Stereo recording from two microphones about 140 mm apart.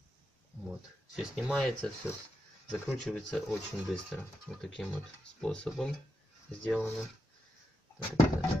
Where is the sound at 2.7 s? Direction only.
5° left (ahead or behind).